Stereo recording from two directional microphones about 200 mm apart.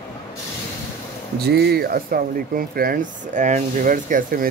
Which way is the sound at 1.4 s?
55° right (ahead or behind).